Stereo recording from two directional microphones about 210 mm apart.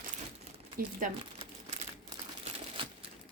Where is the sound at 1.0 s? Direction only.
35° right (ahead or behind).